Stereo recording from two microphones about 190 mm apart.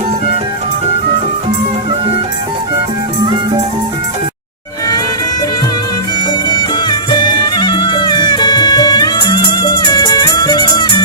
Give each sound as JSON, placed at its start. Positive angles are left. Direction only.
{"t": 6.5, "sound": "music", "side_deg": 20}